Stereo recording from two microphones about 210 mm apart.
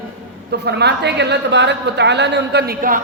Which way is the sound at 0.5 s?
50° right (ahead or behind).